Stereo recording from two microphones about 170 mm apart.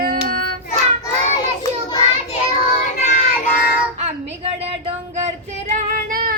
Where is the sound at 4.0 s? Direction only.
35° right (ahead or behind).